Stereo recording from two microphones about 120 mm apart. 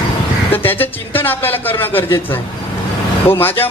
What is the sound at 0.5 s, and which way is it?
A man's voice, 15° left (ahead or behind).